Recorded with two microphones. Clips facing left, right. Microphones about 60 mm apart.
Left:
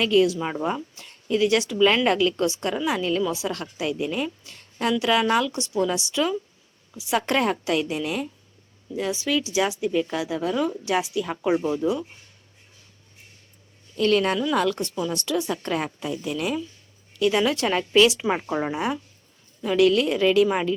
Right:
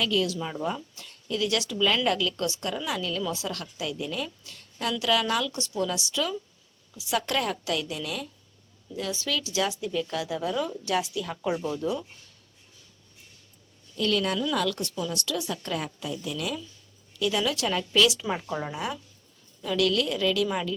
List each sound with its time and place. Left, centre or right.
0.0 s a woman's voice: left
0.4 s a woman's voice: left; by 10.5 s centre
10.5 s speech: left
10.8 s a woman's voice: centre
11.1 s a woman's voice: left
13.9 s a woman's voice: left